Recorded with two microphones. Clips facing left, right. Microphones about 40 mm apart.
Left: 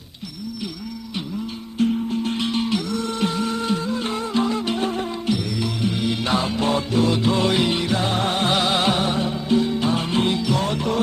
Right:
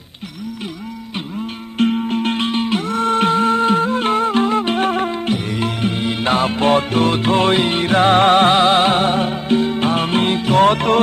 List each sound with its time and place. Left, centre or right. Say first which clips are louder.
1.8 s music: right 4 dB; right
8.5 s music: right 7 dB; right